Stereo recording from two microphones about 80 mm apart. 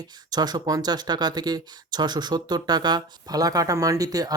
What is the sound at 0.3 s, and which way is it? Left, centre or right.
Speech, right.